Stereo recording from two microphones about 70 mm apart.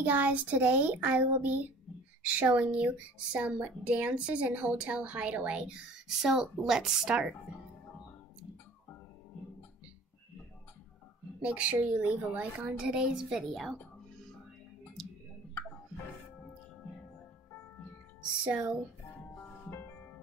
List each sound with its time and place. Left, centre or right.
0.0 s a child's voice: right
11.4 s a child's voice: right
12.6 s speech: centre
15.0 s clicking: centre
18.4 s speech: centre
19.7 s music: left